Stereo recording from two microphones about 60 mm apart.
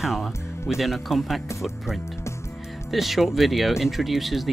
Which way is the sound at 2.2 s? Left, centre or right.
Left.